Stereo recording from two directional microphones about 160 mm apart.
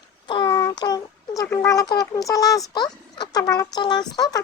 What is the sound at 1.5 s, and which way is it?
A child's voice, 20° left (ahead or behind).